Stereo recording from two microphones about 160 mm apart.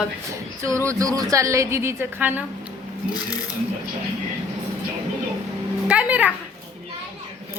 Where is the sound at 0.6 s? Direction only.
20° right (ahead or behind).